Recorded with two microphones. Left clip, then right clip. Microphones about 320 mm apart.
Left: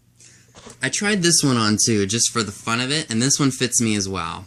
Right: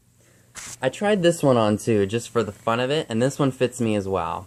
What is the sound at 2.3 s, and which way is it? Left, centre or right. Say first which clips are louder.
Speech: right 1 dB; left.